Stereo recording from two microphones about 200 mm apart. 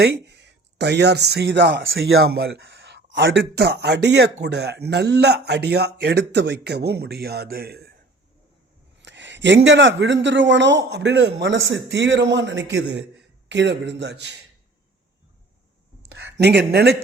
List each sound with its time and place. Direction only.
0.0 s speech: 55° right (ahead or behind)
9.0 s speech: 65° right (ahead or behind)
16.1 s speech: 60° right (ahead or behind)